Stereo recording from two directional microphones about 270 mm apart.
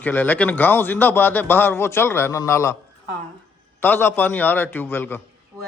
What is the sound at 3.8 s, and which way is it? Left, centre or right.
Speech, centre.